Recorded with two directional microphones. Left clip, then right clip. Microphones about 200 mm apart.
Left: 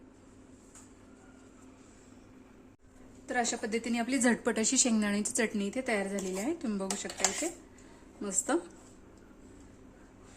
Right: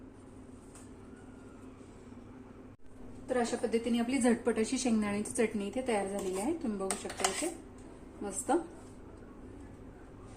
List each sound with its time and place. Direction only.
3.2 s a woman's voice: 50° left (ahead or behind)
8.2 s a woman's voice: 50° left (ahead or behind)